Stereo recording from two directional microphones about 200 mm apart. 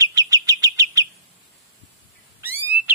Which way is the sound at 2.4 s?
10° right (ahead or behind).